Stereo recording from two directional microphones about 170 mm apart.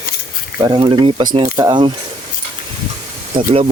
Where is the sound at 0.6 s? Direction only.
30° right (ahead or behind).